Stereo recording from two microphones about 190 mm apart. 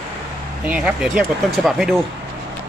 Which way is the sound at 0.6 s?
5° right (ahead or behind).